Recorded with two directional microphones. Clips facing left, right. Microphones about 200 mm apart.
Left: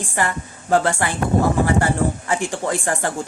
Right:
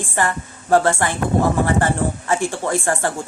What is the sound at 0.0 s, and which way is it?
Speech, 15° left (ahead or behind).